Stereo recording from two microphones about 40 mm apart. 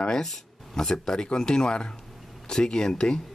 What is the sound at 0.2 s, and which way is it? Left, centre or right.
Speech, centre.